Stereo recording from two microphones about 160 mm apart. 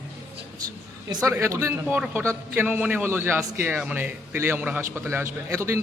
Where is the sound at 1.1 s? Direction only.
20° right (ahead or behind).